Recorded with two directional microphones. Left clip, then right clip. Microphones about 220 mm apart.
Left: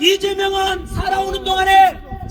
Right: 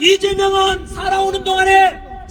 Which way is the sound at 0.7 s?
10° left (ahead or behind).